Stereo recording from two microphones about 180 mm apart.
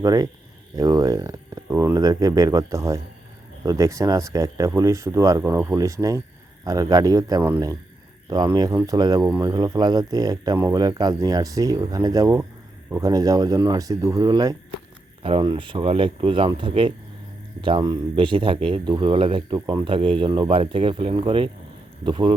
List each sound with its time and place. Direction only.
0.0 s speech: 20° right (ahead or behind)